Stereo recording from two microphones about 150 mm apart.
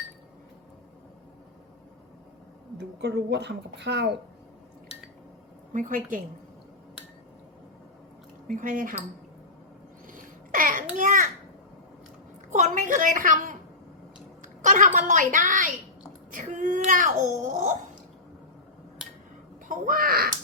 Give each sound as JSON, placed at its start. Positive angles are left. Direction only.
{"t": 2.7, "sound": "a woman's voice", "side_deg": -90}
{"t": 5.7, "sound": "speech", "side_deg": -60}
{"t": 8.4, "sound": "speech", "side_deg": -60}
{"t": 10.1, "sound": "babbling", "side_deg": -60}
{"t": 12.5, "sound": "a woman's voice", "side_deg": -55}
{"t": 19.6, "sound": "speech", "side_deg": -60}